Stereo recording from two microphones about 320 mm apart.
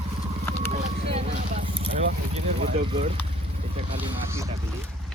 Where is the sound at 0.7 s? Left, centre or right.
Centre.